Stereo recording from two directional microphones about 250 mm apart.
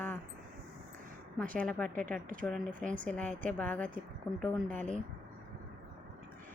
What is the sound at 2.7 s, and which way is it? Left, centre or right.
Speech, right.